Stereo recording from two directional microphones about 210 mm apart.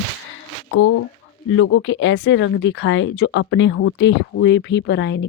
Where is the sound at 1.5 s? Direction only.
75° left (ahead or behind).